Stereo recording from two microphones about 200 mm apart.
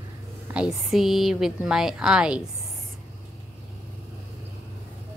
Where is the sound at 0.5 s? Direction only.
5° right (ahead or behind).